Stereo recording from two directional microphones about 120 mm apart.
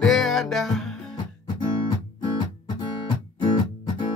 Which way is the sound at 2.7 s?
35° left (ahead or behind).